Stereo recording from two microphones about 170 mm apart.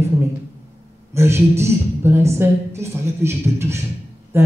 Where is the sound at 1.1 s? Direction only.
15° right (ahead or behind).